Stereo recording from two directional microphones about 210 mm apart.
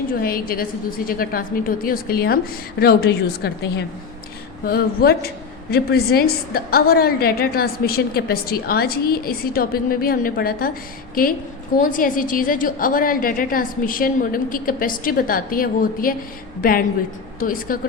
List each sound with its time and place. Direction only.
0.1 s a woman's voice: 45° left (ahead or behind)